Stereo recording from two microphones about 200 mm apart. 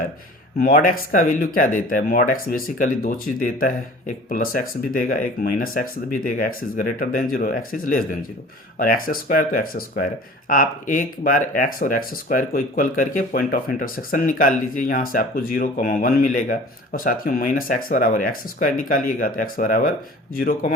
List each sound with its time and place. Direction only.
0.6 s speech: 40° left (ahead or behind)